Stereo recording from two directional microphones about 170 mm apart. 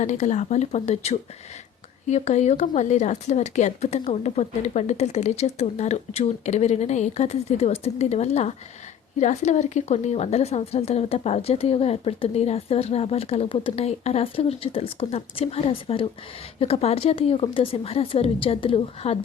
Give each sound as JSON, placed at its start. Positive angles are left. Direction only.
{"t": 0.0, "sound": "a woman's voice", "side_deg": 45}